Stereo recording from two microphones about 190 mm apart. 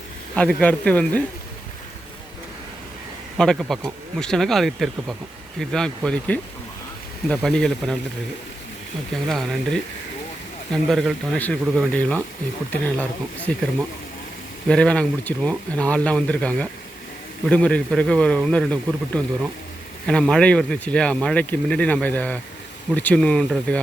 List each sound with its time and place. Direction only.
0.3 s speech: 5° left (ahead or behind)
3.3 s speech: centre (ahead or behind)
9.3 s speech: centre (ahead or behind)